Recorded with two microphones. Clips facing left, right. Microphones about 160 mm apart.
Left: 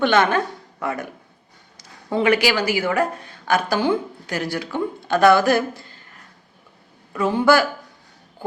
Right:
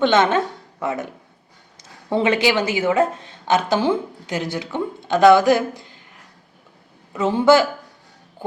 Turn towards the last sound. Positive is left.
turn(degrees=-25)  # may be behind; listen again after turning